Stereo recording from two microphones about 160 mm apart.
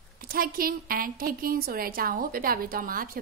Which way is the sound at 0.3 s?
65° right (ahead or behind).